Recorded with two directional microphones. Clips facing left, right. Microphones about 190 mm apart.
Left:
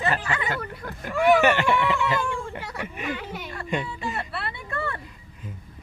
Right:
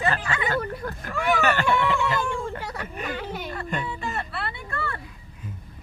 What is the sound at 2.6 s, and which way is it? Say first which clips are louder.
Speech: left 1 dB; 40° right (ahead or behind).